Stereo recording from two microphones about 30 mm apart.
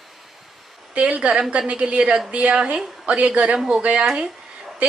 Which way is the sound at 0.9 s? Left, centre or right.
Right.